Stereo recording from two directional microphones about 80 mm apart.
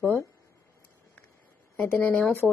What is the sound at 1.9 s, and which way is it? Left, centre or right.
Speech, left.